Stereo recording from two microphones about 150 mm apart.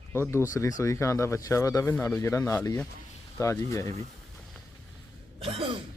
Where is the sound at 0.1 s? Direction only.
15° left (ahead or behind).